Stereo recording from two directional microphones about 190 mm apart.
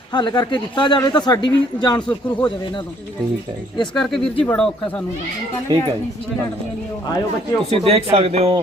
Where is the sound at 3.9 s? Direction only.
Centre (ahead or behind).